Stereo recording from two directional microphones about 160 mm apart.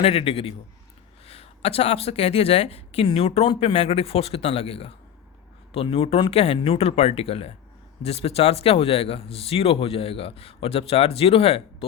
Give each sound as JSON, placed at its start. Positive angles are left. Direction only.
{"t": 0.0, "sound": "speech", "side_deg": 35}